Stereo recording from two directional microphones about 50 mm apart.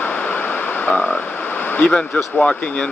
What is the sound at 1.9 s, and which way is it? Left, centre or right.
Speech, centre.